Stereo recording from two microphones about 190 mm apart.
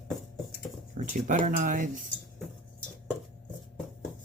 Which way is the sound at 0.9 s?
45° right (ahead or behind).